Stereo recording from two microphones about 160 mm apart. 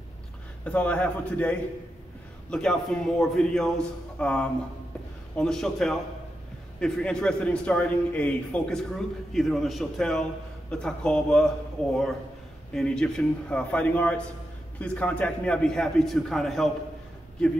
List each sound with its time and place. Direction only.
0.7 s a man's voice: 5° left (ahead or behind)